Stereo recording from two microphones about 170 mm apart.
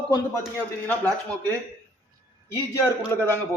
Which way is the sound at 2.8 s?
15° left (ahead or behind).